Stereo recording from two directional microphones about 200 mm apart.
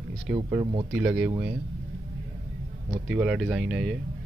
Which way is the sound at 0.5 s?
20° right (ahead or behind).